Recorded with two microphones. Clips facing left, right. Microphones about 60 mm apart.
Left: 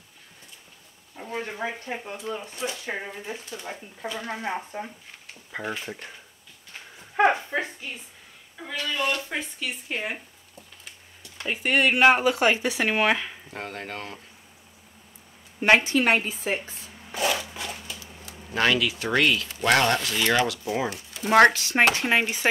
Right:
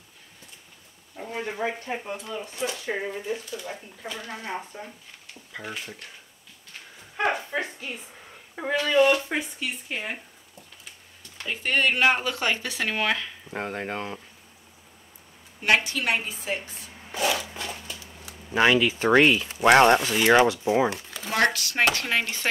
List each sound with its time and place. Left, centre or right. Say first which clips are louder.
1.4 s speech: right 4 dB; centre
2.9 s speech: right 4 dB; left
7.4 s a sound: left 1 dB; centre
8.7 s speech: right 8 dB; right
9.1 s speech: right 4 dB; centre
9.7 s speech: left 1 dB; centre
11.3 s speech: left 2 dB; centre
13.5 s speech: right 4 dB; centre
15.6 s a woman's voice: left 4 dB; left
17.2 s a sound: even; centre
17.6 s a sound: even; centre
18.2 s speech: right 3 dB; centre
21.2 s speech: left 7 dB; left